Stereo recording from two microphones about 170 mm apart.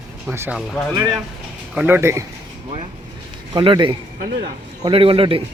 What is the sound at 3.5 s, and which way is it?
A man's voice, 30° right (ahead or behind).